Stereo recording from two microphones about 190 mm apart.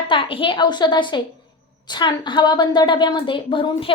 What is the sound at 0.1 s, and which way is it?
A woman's voice, 25° left (ahead or behind).